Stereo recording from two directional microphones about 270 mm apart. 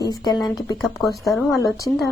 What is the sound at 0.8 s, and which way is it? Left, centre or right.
Speech, centre.